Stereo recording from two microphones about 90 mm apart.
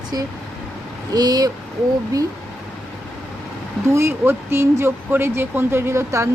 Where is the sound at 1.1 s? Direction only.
45° right (ahead or behind).